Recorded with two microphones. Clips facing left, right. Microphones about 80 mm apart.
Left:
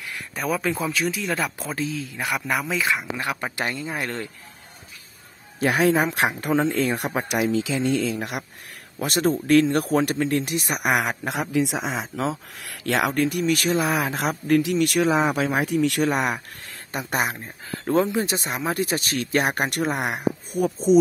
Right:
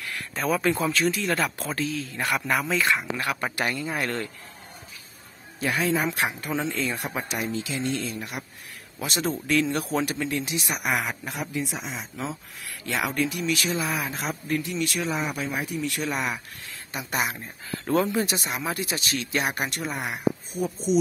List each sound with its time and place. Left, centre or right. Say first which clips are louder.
0.0 s a sound: even; centre
0.6 s speech: right 1 dB; centre
1.6 s speech: left 1 dB; centre
5.6 s speech: left 5 dB; left
7.2 s speech: left 7 dB; left
9.0 s speech: left 6 dB; left
13.1 s speech: left 4 dB; left
16.9 s speech: left 3 dB; left